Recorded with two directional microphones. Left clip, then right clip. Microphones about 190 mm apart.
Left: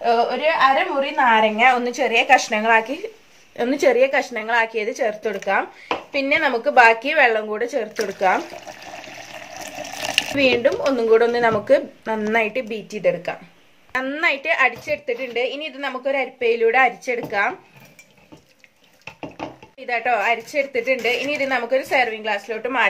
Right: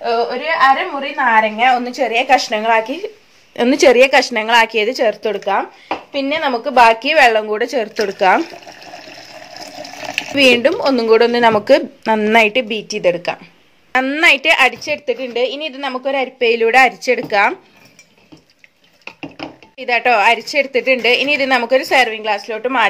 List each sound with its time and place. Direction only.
0.0 s a woman's voice: 10° left (ahead or behind)
1.6 s a woman's voice: 15° right (ahead or behind)
3.5 s a woman's voice: 45° right (ahead or behind); by 5.7 s 30° right (ahead or behind)
6.1 s a woman's voice: 15° right (ahead or behind); by 8.3 s 50° right (ahead or behind)
9.3 s water: centre (ahead or behind)
10.3 s a woman's voice: 40° right (ahead or behind)
19.8 s a woman's voice: 45° right (ahead or behind)